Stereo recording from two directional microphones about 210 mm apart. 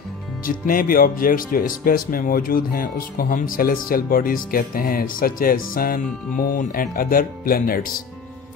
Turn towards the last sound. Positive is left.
turn(degrees=45)  # may be behind; listen again after turning